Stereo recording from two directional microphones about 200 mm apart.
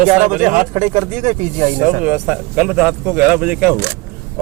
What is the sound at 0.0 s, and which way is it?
Speech, 35° right (ahead or behind).